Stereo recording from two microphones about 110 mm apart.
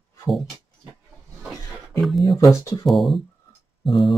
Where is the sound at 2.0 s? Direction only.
Centre (ahead or behind).